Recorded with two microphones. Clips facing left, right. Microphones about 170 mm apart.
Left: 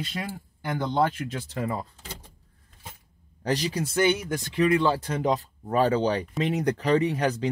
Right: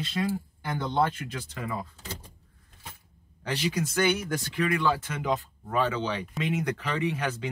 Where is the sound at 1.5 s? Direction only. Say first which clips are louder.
Left 5 dB; 40° left (ahead or behind).